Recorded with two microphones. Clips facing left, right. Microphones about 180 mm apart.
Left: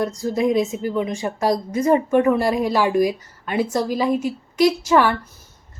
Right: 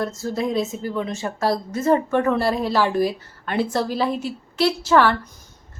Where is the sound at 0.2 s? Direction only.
15° left (ahead or behind).